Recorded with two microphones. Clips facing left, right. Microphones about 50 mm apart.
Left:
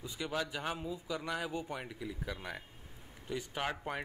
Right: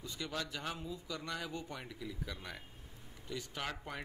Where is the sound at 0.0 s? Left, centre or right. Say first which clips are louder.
Left 4 dB; centre.